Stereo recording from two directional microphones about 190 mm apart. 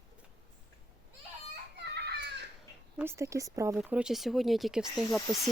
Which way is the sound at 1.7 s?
60° right (ahead or behind).